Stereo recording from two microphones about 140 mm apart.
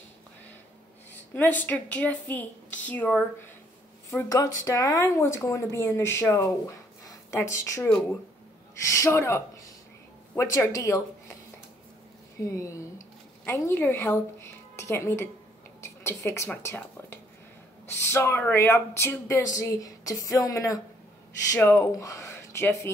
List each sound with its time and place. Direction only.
1.3 s a woman's voice: 10° left (ahead or behind)
4.3 s speech: 25° left (ahead or behind)
12.4 s a woman's voice: 20° left (ahead or behind)